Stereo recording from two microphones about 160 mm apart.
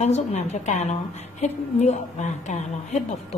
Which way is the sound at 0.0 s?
45° left (ahead or behind).